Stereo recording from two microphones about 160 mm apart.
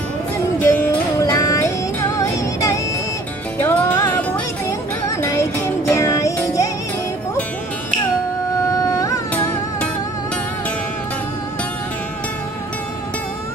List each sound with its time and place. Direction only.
0.6 s music: 10° left (ahead or behind)
1.2 s music: 20° left (ahead or behind)
8.6 s a sound: 20° left (ahead or behind)